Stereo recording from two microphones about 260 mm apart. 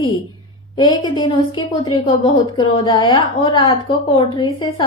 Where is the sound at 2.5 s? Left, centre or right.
Centre.